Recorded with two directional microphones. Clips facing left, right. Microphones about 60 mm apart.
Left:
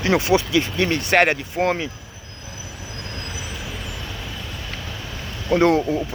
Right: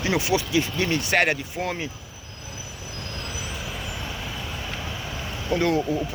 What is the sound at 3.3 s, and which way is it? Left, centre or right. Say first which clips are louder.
Vehicle: left 1 dB; centre.